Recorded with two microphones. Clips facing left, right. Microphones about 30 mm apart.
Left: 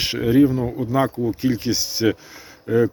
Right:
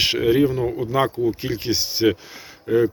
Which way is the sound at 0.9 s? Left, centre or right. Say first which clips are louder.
Even; right.